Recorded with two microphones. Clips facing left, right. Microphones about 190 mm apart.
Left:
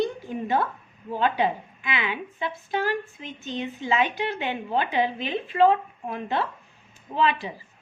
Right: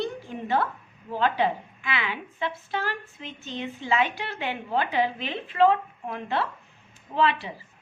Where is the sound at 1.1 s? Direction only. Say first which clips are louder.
Left 1 dB; 15° left (ahead or behind).